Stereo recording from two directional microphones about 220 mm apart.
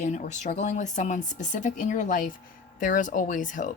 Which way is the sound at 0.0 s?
35° left (ahead or behind).